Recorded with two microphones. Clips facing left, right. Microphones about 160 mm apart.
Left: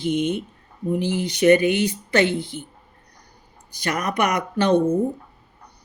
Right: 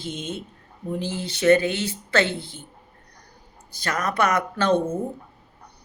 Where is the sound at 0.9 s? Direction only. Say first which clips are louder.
Left 6 dB; 15° left (ahead or behind).